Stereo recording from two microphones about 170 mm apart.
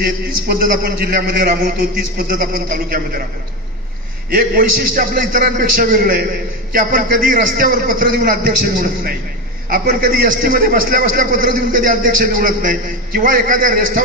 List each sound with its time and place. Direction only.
0.0 s a man's voice: 60° right (ahead or behind)
4.3 s a man's voice: 60° right (ahead or behind)